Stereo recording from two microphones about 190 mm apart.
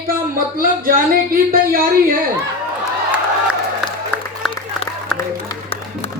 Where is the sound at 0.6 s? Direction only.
50° right (ahead or behind).